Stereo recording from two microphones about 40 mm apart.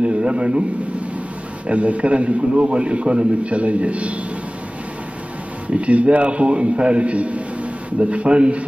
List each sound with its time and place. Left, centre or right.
0.0 s a man's voice: right
5.7 s a man's voice: right